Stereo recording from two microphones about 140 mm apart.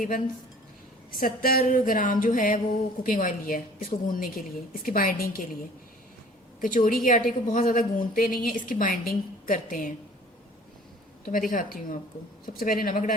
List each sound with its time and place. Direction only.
1.1 s a woman's voice: 90° left
6.6 s a woman's voice: 75° left (ahead or behind)
11.3 s a woman's voice: 75° left (ahead or behind)
12.5 s a woman's voice: 90° left